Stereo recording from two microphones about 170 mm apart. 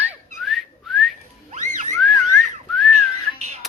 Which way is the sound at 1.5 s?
45° right (ahead or behind).